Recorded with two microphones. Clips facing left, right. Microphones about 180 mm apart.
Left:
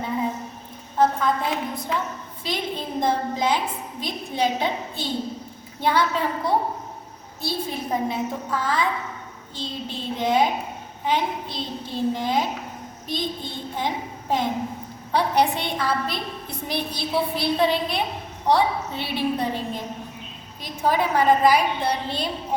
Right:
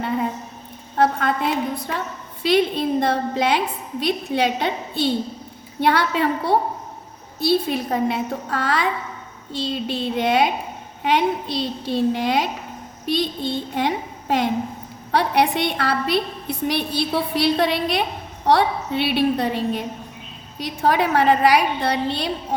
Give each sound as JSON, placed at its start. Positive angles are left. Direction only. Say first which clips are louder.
{"t": 1.2, "sound": "a woman's voice", "louder": "right 3 dB", "side_deg": -70}